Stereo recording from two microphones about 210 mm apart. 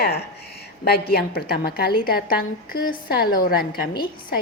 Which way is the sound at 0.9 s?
45° left (ahead or behind).